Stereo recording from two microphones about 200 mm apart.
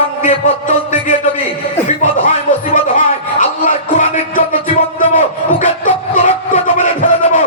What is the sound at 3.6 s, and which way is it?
Music, 40° left (ahead or behind).